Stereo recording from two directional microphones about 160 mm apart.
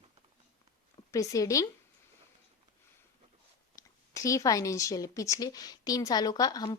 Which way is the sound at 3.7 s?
20° left (ahead or behind).